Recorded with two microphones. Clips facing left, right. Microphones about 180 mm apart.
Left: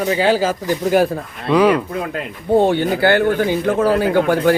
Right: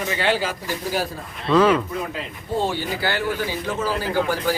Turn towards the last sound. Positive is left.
turn(degrees=60)  # may be behind; listen again after turning